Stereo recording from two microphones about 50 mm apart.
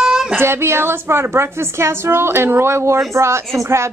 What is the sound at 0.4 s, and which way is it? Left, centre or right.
A woman's voice, right.